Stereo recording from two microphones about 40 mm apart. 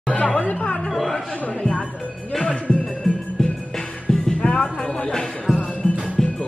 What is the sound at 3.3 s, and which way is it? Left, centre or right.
Music, centre.